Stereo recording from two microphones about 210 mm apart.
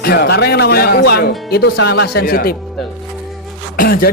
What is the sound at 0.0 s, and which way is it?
A man's voice, 50° left (ahead or behind).